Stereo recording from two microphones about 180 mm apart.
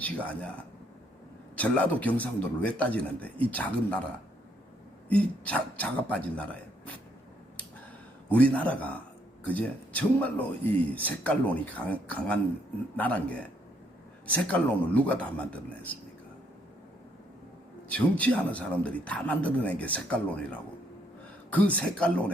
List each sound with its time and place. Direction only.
0.0 s speech: 10° left (ahead or behind)
1.5 s speech: 10° left (ahead or behind)
5.0 s speech: 10° left (ahead or behind)
8.3 s speech: 10° left (ahead or behind)
17.9 s speech: 10° left (ahead or behind)